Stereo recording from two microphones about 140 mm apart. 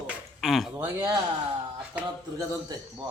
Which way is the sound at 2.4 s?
25° right (ahead or behind).